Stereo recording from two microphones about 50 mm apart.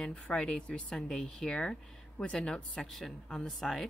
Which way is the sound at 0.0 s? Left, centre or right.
Centre.